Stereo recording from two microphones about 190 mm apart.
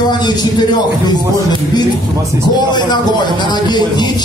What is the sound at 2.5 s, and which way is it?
A man's voice, 20° left (ahead or behind).